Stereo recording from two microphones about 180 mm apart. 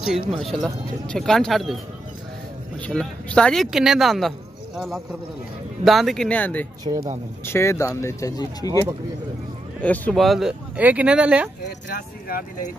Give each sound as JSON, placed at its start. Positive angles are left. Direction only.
{"t": 0.3, "sound": "speech", "side_deg": 0}
{"t": 2.9, "sound": "speech", "side_deg": 5}
{"t": 6.8, "sound": "speech", "side_deg": -20}
{"t": 7.4, "sound": "speech", "side_deg": 15}
{"t": 9.8, "sound": "speech", "side_deg": 5}
{"t": 11.9, "sound": "speech", "side_deg": 50}